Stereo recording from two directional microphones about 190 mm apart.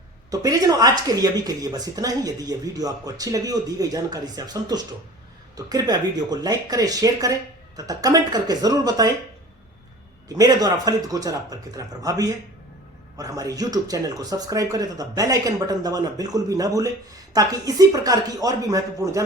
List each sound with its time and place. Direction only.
0.3 s speech: 20° right (ahead or behind)
10.2 s speech: 20° right (ahead or behind)